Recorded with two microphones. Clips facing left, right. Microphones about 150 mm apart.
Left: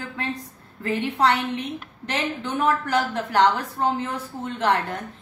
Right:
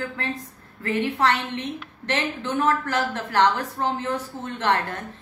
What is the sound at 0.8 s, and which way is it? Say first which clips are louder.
A woman's voice: left 1 dB; 15° left (ahead or behind).